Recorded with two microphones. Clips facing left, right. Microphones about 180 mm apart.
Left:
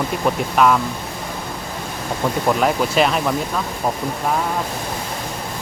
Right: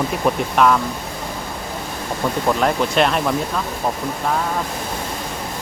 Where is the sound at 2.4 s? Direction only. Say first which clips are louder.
Even; 5° left (ahead or behind).